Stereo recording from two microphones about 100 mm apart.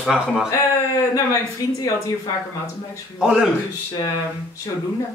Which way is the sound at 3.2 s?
10° right (ahead or behind).